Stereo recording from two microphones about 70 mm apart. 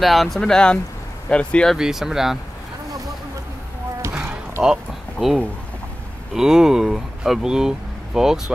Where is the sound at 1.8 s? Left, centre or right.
Centre.